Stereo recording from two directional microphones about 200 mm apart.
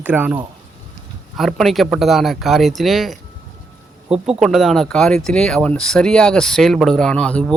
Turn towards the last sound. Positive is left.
turn(degrees=5)  # may be behind; listen again after turning